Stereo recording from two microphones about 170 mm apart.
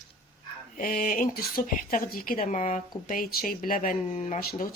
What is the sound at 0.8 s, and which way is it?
Speech, 55° left (ahead or behind).